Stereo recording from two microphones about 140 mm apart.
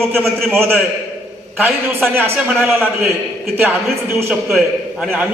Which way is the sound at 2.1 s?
15° right (ahead or behind).